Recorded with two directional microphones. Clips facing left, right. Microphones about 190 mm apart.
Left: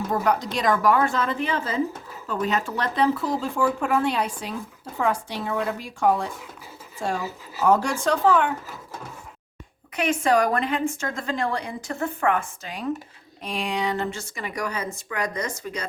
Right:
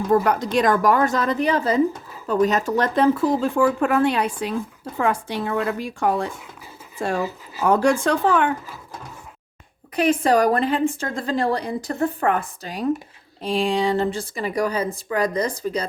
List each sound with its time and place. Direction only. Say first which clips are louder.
0.1 s a woman's voice: right 6 dB; 55° right (ahead or behind)
7.7 s speech: right 3 dB; 60° right (ahead or behind)
9.9 s a woman's voice: right 3 dB; 35° right (ahead or behind)